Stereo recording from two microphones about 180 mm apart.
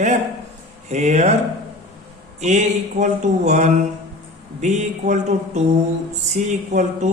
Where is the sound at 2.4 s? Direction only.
40° right (ahead or behind).